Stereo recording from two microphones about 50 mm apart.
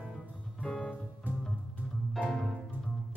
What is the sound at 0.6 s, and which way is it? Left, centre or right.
Music, left.